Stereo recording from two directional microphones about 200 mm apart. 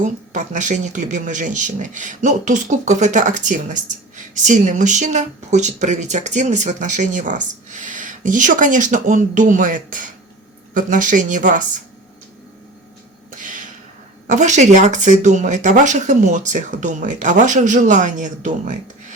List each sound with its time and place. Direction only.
0.0 s speech: 40° right (ahead or behind)
13.3 s a sound: 40° right (ahead or behind)
14.3 s speech: 35° right (ahead or behind)